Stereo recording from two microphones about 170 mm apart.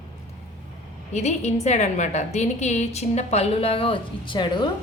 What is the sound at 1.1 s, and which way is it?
A woman's voice, 40° left (ahead or behind).